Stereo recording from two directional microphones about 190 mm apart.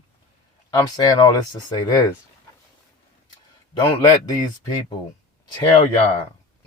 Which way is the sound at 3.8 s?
25° left (ahead or behind).